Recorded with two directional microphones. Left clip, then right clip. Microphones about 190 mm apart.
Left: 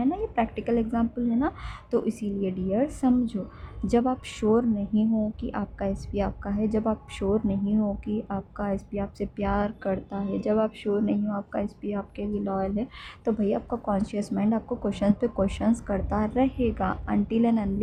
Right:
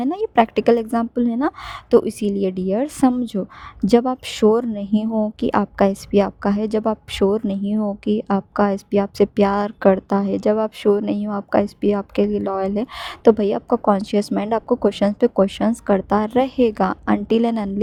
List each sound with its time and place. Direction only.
0.0 s a woman's voice: 55° right (ahead or behind)
1.9 s a woman's voice: 45° right (ahead or behind)